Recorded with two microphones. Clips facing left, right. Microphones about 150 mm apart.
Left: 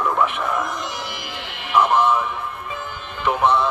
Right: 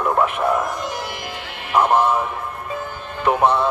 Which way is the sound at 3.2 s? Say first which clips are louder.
Right 2 dB; 40° right (ahead or behind).